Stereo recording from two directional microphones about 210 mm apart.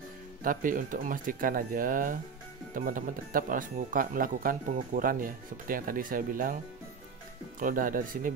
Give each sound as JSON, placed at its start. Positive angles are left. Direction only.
{"t": 0.4, "sound": "speech", "side_deg": -40}